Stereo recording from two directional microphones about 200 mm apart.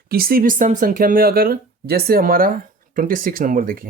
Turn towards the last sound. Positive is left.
turn(degrees=-45)  # may be behind; listen again after turning